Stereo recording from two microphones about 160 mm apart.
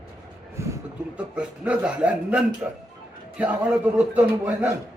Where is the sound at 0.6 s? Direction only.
20° right (ahead or behind).